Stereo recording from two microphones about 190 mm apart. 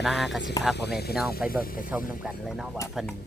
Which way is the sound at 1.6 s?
50° left (ahead or behind).